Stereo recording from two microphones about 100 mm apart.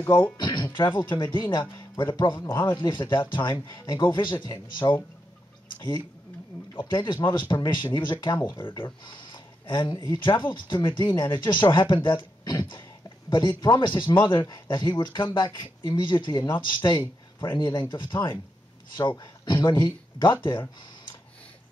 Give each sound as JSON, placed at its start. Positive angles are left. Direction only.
{"t": 0.4, "sound": "music", "side_deg": 45}
{"t": 0.7, "sound": "speech", "side_deg": 50}